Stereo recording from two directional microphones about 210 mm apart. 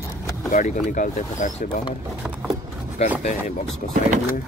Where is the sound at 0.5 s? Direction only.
35° left (ahead or behind).